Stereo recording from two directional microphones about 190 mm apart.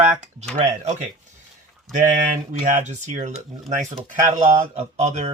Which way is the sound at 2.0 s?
40° right (ahead or behind).